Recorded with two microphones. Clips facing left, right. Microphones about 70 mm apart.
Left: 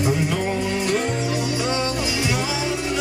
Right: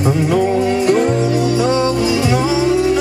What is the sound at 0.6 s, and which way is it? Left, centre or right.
Music, right.